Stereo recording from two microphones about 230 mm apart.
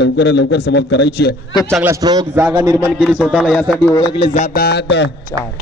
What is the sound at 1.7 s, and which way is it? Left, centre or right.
A man's voice, centre.